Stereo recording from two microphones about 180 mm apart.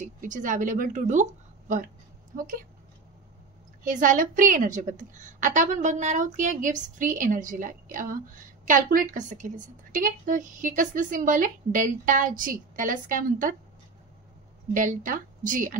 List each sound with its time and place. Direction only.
0.0 s a woman's voice: 45° right (ahead or behind)
3.8 s a woman's voice: 45° right (ahead or behind)
14.7 s a woman's voice: 45° right (ahead or behind)